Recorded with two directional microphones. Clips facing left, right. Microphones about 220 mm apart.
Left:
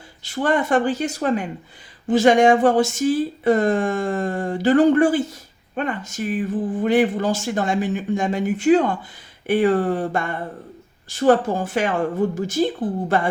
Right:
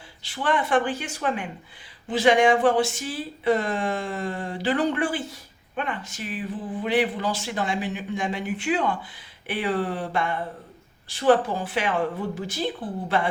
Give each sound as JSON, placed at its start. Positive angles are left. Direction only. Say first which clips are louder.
{"t": 0.2, "sound": "speech", "louder": "left 5 dB", "side_deg": 45}